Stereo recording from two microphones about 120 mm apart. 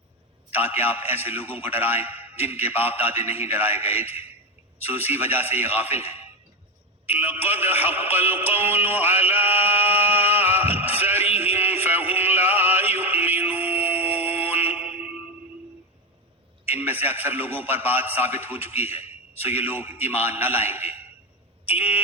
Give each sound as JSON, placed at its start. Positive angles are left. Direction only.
{"t": 0.5, "sound": "a man's voice", "side_deg": -15}
{"t": 7.1, "sound": "music", "side_deg": -15}
{"t": 16.6, "sound": "a man's voice", "side_deg": -15}